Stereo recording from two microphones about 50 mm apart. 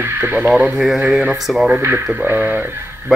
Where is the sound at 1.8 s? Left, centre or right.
Right.